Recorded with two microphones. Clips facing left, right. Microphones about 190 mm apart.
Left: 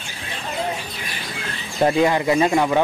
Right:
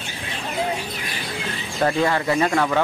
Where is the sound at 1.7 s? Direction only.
15° left (ahead or behind).